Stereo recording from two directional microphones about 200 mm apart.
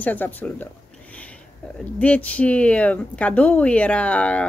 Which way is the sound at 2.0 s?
5° left (ahead or behind).